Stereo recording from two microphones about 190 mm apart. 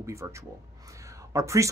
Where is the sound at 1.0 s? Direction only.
15° right (ahead or behind).